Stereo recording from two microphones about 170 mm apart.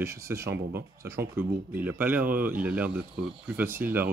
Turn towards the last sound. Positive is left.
turn(degrees=-15)  # may be behind; listen again after turning